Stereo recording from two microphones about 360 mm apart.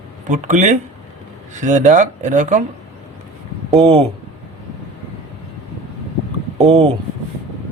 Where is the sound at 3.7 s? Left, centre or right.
Centre.